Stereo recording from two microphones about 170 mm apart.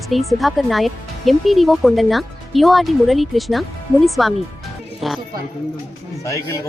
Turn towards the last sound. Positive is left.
turn(degrees=20)  # may be behind; listen again after turning